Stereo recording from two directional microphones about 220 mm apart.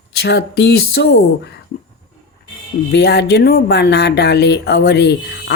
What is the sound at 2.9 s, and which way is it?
Speech, 50° left (ahead or behind).